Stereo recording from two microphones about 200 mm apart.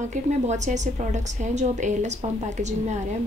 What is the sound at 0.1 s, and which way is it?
A woman's voice, 35° right (ahead or behind).